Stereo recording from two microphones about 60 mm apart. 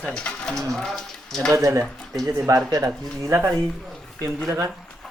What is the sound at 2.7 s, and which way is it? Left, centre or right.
Speech, right.